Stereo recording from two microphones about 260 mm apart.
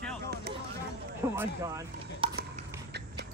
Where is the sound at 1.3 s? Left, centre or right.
Centre.